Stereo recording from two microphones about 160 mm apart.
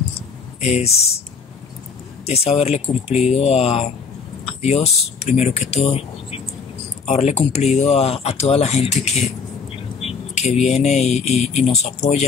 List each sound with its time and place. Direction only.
0.6 s speech: 45° left (ahead or behind)
2.2 s speech: 40° left (ahead or behind)
7.1 s speech: 45° left (ahead or behind)